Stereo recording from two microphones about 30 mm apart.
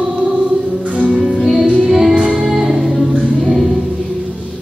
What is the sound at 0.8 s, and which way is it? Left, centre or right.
Music, right.